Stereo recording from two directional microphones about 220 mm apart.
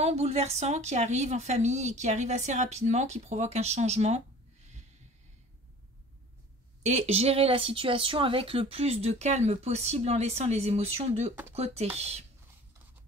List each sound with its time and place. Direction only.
0.0 s a woman's voice: 30° right (ahead or behind)
6.8 s speech: 30° right (ahead or behind)